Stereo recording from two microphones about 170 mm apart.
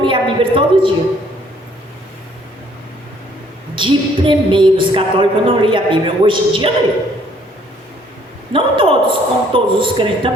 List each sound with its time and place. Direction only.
0.0 s a woman's voice: 30° right (ahead or behind)
3.8 s a woman's voice: 30° right (ahead or behind)
8.5 s a woman's voice: 30° right (ahead or behind)